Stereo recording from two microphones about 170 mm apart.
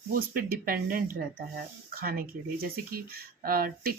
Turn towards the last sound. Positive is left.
turn(degrees=-60)  # may be behind; listen again after turning